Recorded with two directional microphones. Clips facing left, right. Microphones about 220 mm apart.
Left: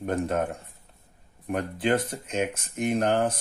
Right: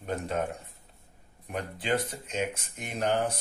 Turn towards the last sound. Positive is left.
turn(degrees=50)  # may be behind; listen again after turning